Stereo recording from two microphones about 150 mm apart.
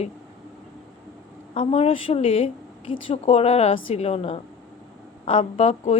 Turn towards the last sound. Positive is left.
turn(degrees=45)  # may be behind; listen again after turning